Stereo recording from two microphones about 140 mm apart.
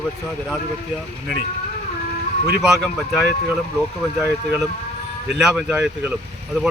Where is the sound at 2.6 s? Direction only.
Centre (ahead or behind).